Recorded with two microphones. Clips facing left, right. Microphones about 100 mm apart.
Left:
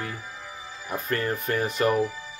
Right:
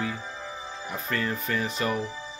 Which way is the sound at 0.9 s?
45° left (ahead or behind).